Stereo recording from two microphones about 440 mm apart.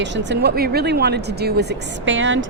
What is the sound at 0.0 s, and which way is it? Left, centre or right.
Speech, right.